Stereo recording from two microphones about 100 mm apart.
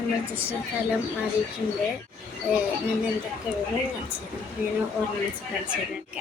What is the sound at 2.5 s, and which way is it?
Speech, 15° right (ahead or behind).